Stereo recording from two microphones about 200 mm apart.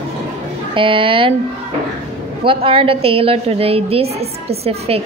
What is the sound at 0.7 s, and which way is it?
Speech, 25° right (ahead or behind).